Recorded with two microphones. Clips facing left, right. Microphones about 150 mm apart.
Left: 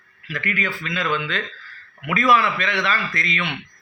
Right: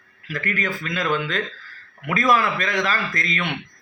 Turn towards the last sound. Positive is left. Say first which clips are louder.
# even
turn(degrees=-40)  # may be behind; listen again after turning